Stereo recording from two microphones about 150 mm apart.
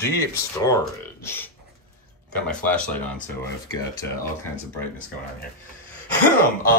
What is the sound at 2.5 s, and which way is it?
Speech, 10° left (ahead or behind).